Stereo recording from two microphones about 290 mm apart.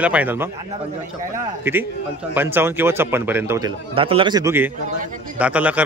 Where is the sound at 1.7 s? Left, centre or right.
Centre.